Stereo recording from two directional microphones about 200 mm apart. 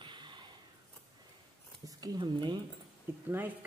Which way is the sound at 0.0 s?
25° right (ahead or behind).